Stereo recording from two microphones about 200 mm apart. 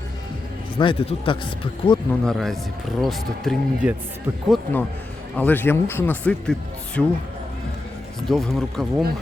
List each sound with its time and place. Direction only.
0.8 s speech: 25° left (ahead or behind)
2.2 s speech: centre (ahead or behind)
8.3 s speech: centre (ahead or behind)